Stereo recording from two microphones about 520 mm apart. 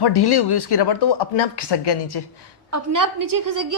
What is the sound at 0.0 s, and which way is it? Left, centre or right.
A woman's voice, left.